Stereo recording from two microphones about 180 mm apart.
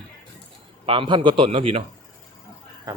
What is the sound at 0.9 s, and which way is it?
Speech, 30° right (ahead or behind).